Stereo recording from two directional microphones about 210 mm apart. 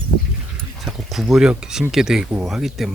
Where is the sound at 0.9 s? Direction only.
Centre (ahead or behind).